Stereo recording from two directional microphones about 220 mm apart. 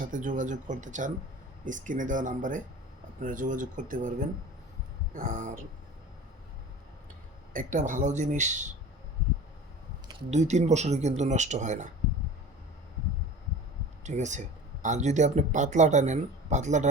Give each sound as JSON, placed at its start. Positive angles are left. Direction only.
{"t": 0.0, "sound": "speech", "side_deg": -35}
{"t": 7.5, "sound": "speech", "side_deg": -35}
{"t": 10.2, "sound": "speech", "side_deg": -30}
{"t": 14.0, "sound": "speech", "side_deg": -35}